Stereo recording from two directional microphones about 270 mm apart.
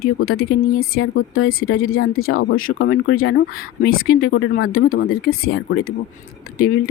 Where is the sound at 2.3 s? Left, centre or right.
Left.